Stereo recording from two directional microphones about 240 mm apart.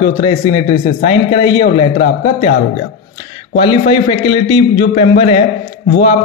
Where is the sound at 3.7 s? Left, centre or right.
Left.